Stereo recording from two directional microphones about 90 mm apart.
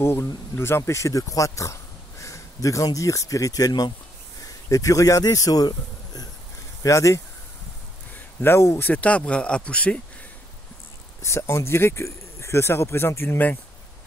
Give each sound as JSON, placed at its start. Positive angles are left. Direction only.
{"t": 0.0, "sound": "speech", "side_deg": 25}
{"t": 8.4, "sound": "speech", "side_deg": 30}
{"t": 11.2, "sound": "speech", "side_deg": 30}